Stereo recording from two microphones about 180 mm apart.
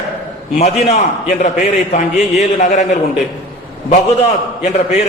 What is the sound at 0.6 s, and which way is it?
A man's voice, 40° left (ahead or behind).